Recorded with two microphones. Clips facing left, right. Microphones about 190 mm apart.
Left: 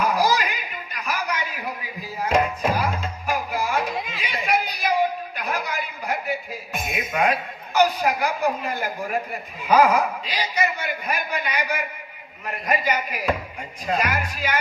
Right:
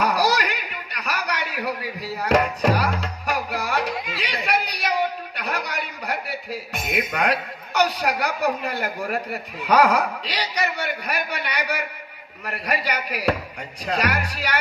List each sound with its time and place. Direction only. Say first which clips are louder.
0.0 s chuckle: even; 75° right (ahead or behind)
3.9 s chatter: even; 25° left (ahead or behind)
4.2 s a sound: left 1 dB; 70° right (ahead or behind)
6.7 s a woman's voice: right 1 dB; 70° right (ahead or behind)